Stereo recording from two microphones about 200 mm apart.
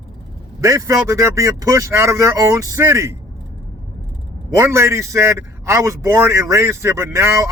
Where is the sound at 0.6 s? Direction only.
15° right (ahead or behind).